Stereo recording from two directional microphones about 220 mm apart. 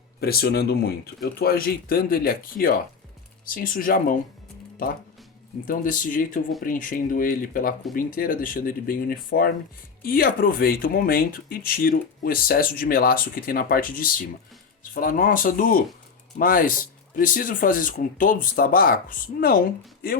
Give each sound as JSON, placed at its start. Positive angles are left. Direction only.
{"t": 0.2, "sound": "speech", "side_deg": 45}
{"t": 5.6, "sound": "speech", "side_deg": 40}